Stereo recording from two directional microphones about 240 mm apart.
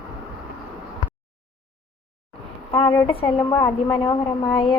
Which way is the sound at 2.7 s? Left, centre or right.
Left.